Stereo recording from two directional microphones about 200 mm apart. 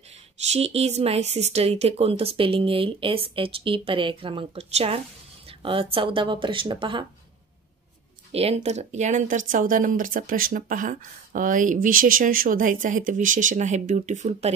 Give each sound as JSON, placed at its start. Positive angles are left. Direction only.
{"t": 0.5, "sound": "speech", "side_deg": -30}
{"t": 8.3, "sound": "speech", "side_deg": -30}